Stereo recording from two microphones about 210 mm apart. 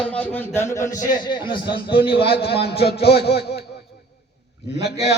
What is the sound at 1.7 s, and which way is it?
Speech, 25° left (ahead or behind).